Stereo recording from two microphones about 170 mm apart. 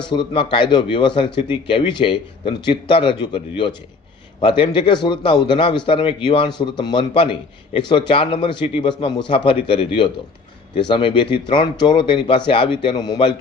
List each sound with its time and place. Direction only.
0.1 s a man's voice: 30° left (ahead or behind)